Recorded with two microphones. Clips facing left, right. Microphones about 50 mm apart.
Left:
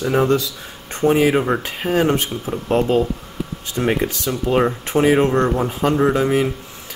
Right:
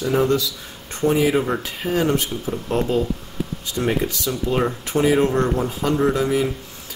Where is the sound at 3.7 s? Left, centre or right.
Left.